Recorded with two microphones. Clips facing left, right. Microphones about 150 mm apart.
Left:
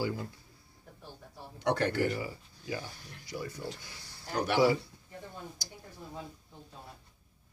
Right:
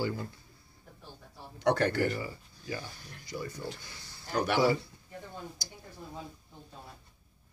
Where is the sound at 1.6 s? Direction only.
40° right (ahead or behind).